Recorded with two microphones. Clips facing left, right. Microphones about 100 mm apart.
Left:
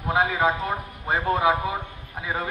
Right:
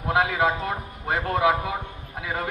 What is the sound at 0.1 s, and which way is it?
Speech, 70° right (ahead or behind).